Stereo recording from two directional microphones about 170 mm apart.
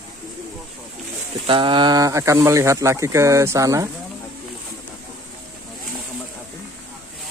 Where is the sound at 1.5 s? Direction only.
30° right (ahead or behind).